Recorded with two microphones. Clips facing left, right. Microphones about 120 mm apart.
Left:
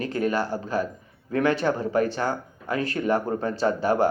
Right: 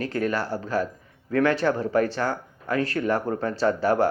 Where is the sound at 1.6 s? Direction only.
25° left (ahead or behind).